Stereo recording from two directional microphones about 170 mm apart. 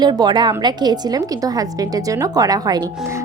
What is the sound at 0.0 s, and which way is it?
A woman's voice, 25° right (ahead or behind).